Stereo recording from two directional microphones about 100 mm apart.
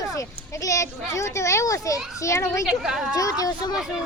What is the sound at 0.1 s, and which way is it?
A child's voice, 35° left (ahead or behind).